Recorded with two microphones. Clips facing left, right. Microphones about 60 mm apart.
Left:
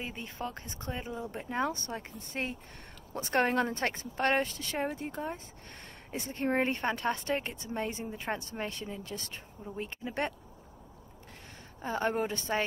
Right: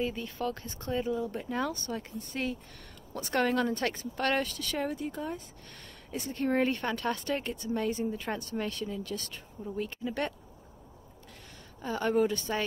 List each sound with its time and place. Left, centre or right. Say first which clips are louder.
0.0 s speech: right 6 dB; left
11.8 s speech: right 3 dB; left